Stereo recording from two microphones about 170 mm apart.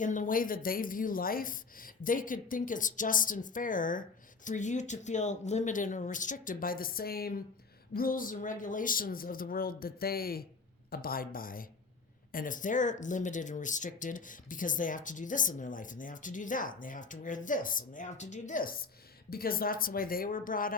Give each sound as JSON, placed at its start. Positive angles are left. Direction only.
{"t": 0.0, "sound": "speech", "side_deg": 50}